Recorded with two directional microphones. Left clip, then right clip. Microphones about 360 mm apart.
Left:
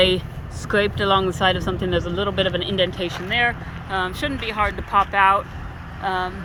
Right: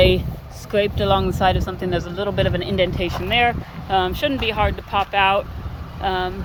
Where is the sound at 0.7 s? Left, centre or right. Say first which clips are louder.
Even; centre.